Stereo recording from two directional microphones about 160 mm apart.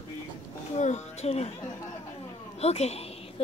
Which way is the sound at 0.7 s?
45° left (ahead or behind).